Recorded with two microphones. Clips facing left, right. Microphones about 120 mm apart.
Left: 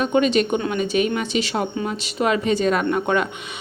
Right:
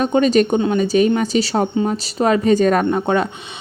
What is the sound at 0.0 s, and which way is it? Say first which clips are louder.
Speech: right 4 dB; 40° right (ahead or behind).